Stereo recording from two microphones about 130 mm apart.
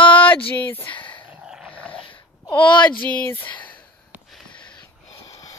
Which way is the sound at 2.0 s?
40° left (ahead or behind).